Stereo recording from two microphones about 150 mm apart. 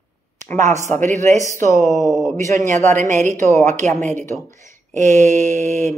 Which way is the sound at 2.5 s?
60° right (ahead or behind).